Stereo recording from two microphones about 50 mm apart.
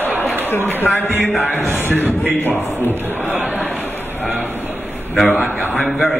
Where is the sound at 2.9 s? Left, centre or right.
Right.